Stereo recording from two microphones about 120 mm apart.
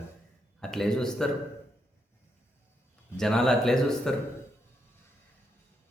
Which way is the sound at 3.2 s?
5° left (ahead or behind).